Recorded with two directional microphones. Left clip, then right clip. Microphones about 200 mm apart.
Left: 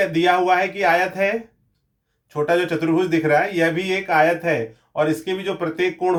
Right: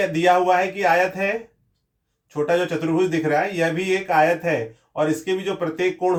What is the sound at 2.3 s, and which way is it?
Speech, 40° left (ahead or behind).